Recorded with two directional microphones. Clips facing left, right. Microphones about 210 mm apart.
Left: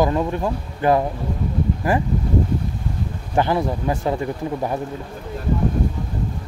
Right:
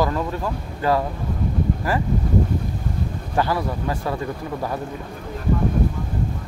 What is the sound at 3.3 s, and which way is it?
Speech, 20° left (ahead or behind).